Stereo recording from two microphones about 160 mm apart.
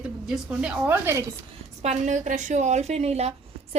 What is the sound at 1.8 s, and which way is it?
A woman's voice, 50° right (ahead or behind).